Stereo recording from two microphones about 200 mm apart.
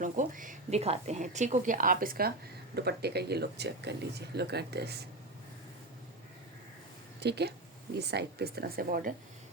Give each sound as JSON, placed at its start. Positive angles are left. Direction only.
{"t": 0.0, "sound": "a woman's voice", "side_deg": -40}
{"t": 7.2, "sound": "speech", "side_deg": -55}